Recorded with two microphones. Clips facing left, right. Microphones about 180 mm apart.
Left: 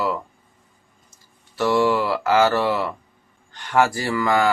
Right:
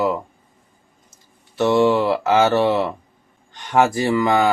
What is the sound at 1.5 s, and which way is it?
Speech, 25° right (ahead or behind).